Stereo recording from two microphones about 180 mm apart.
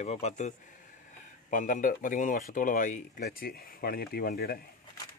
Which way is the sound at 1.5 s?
45° left (ahead or behind).